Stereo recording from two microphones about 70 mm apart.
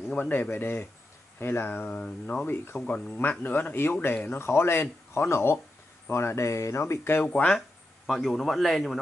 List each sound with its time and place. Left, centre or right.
0.2 s speech: left
1.9 s a sound: centre
2.4 s speech: left
2.9 s speech: centre
7.3 s a sound: centre
8.1 s a man's voice: centre